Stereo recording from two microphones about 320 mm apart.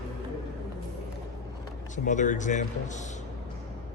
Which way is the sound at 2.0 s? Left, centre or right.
Left.